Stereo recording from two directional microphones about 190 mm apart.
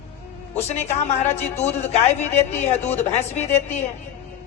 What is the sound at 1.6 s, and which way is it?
Speech, 10° left (ahead or behind).